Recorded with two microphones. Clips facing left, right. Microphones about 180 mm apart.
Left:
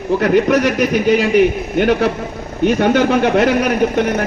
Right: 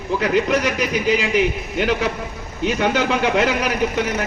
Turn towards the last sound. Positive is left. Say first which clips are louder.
# left 6 dB
turn(degrees=55)  # may be behind; listen again after turning